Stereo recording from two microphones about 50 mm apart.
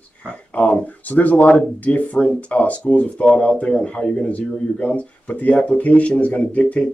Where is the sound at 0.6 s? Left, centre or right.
Left.